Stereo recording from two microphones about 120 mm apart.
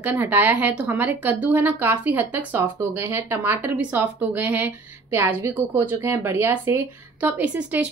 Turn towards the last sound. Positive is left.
turn(degrees=-10)  # may be behind; listen again after turning